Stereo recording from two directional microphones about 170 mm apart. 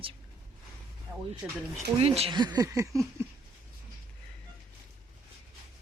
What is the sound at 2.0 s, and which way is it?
A woman's voice, 35° right (ahead or behind).